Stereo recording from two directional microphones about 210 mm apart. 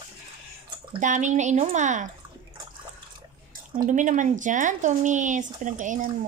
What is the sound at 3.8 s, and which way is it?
Speech, 35° right (ahead or behind).